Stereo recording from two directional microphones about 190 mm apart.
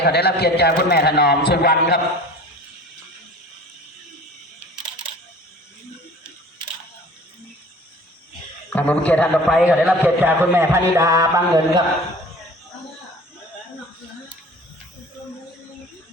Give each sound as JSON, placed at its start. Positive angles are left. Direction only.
{"t": 0.0, "sound": "a man's voice", "side_deg": 60}
{"t": 8.7, "sound": "a man's voice", "side_deg": 5}